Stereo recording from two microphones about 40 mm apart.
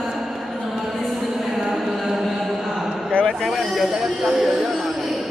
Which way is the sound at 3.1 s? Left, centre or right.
Left.